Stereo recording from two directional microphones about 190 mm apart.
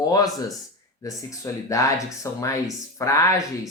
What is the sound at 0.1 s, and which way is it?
Speech, 20° left (ahead or behind).